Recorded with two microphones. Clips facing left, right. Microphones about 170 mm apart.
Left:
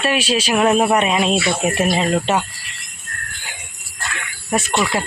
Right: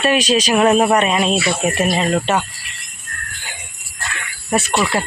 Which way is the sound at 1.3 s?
10° right (ahead or behind).